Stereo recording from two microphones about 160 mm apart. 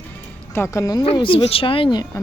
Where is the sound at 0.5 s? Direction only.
15° left (ahead or behind).